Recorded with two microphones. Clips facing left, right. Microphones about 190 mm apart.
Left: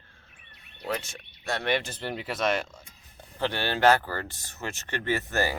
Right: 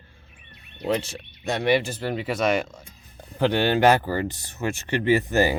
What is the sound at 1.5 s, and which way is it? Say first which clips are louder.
Speech: right 6 dB; 15° right (ahead or behind).